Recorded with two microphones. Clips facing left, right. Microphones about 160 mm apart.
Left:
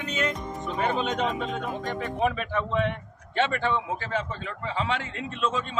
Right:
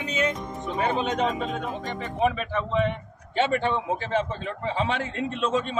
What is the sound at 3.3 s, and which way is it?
A man's voice, 20° right (ahead or behind).